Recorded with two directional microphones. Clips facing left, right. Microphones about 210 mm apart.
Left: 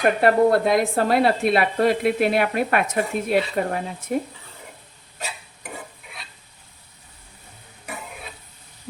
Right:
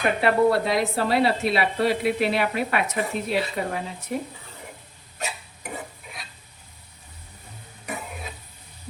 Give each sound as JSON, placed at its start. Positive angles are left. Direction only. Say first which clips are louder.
{"t": 0.0, "sound": "speech", "louder": "left 3 dB", "side_deg": 50}